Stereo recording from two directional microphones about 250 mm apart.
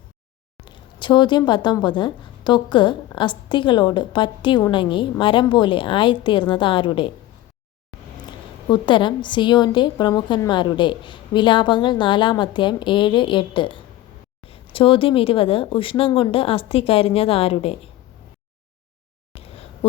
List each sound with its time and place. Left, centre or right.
0.6 s speech: centre
8.7 s speech: centre
19.3 s a sound: left